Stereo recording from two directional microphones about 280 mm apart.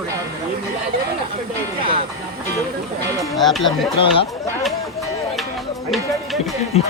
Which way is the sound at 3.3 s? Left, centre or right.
Centre.